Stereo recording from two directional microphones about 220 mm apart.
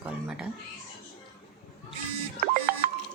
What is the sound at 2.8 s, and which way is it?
Music, 40° right (ahead or behind).